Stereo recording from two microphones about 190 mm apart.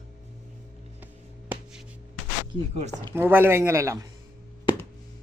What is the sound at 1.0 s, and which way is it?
Music, 10° right (ahead or behind).